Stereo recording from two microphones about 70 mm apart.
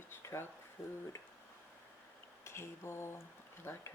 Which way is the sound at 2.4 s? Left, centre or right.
Left.